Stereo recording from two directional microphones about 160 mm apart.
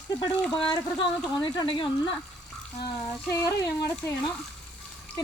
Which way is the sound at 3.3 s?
20° left (ahead or behind).